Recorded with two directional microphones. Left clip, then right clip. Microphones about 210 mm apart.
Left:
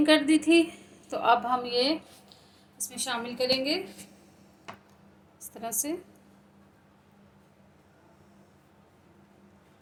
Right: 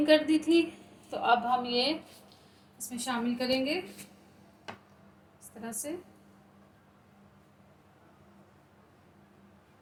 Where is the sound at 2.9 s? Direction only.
45° left (ahead or behind).